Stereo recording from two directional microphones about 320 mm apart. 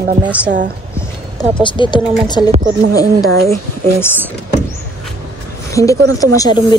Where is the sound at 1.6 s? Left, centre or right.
Centre.